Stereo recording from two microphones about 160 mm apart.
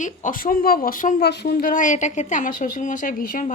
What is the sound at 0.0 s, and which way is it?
A woman's voice, 60° left (ahead or behind).